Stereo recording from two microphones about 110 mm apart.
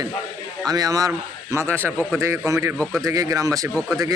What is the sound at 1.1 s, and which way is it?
A man's voice, 20° right (ahead or behind).